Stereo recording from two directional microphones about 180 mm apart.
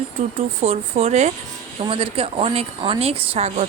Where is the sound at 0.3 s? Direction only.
35° right (ahead or behind).